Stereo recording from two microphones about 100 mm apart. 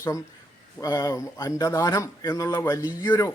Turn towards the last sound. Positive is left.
turn(degrees=40)  # may be behind; listen again after turning